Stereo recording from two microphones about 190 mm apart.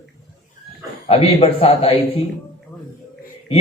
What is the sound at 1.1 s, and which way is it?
Speech, 30° left (ahead or behind).